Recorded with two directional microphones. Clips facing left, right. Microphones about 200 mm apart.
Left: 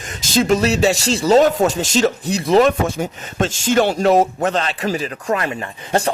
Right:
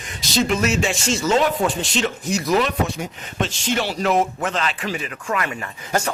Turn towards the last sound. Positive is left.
turn(degrees=30)  # may be behind; listen again after turning